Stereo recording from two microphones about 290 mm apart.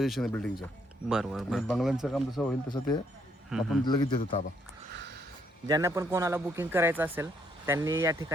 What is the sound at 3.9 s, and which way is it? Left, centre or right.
Speech, centre.